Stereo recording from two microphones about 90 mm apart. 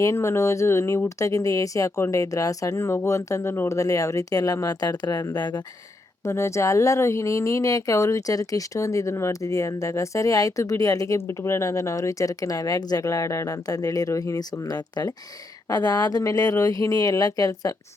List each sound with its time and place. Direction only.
0.0 s speech: 30° left (ahead or behind); by 5.6 s 55° left (ahead or behind)
6.2 s speech: 30° left (ahead or behind)